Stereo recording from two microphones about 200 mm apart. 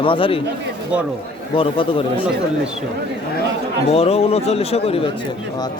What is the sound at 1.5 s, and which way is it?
Speech, 25° left (ahead or behind).